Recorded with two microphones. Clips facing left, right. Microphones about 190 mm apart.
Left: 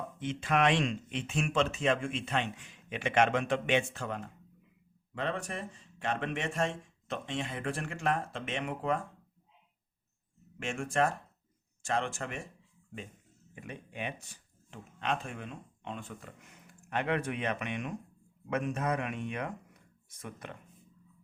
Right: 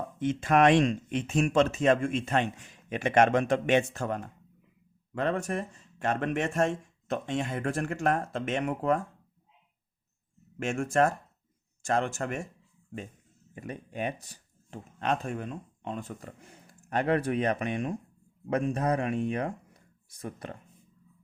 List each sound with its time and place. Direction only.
0.2 s speech: 45° right (ahead or behind)
10.6 s speech: 45° right (ahead or behind)
13.6 s speech: 40° right (ahead or behind)